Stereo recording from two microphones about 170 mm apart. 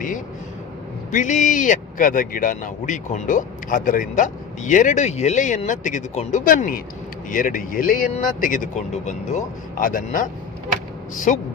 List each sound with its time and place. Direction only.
1.1 s a man's voice: 45° left (ahead or behind)
11.3 s a man's voice: 50° left (ahead or behind)